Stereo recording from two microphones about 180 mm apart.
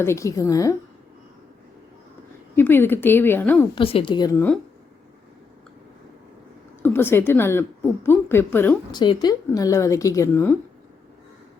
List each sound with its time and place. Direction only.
0.0 s a woman's voice: 15° left (ahead or behind)
2.6 s a woman's voice: 10° left (ahead or behind)
3.8 s a woman's voice: 30° left (ahead or behind); by 4.5 s 15° left (ahead or behind)
6.8 s a woman's voice: 10° left (ahead or behind)
8.9 s a woman's voice: 25° left (ahead or behind)